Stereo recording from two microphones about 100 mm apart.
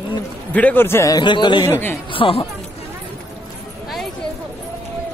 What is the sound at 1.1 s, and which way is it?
Speech, 50° left (ahead or behind).